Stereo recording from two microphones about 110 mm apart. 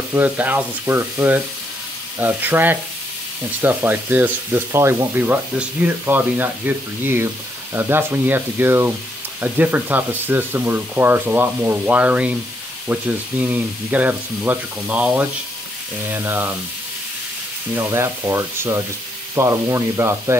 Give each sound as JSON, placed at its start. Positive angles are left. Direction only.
{"t": 0.1, "sound": "speech", "side_deg": -15}
{"t": 17.7, "sound": "speech", "side_deg": -25}